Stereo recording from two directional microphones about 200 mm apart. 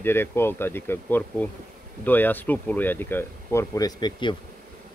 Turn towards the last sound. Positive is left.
turn(degrees=20)  # may be behind; listen again after turning